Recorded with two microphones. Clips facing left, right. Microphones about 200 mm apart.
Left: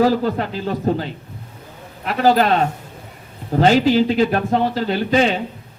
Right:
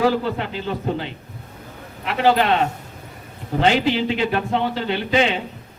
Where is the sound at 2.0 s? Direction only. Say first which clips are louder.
Left 2 dB; 40° left (ahead or behind).